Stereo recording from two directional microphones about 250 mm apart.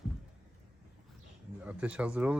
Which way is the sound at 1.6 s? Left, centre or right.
Centre.